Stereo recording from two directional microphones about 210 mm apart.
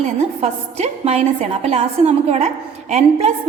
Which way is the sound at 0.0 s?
30° right (ahead or behind).